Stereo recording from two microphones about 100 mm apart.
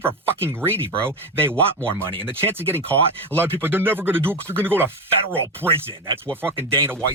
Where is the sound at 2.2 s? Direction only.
20° right (ahead or behind).